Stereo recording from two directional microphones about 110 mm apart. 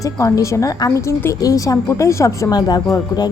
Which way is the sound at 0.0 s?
30° left (ahead or behind).